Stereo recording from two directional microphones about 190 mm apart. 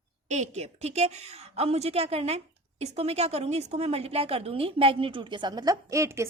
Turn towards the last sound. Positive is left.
turn(degrees=-15)  # may be behind; listen again after turning